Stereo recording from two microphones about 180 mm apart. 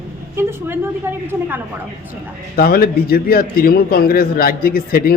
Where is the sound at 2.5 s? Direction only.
55° left (ahead or behind).